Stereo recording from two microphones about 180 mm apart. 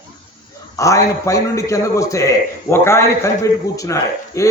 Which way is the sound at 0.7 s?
15° left (ahead or behind).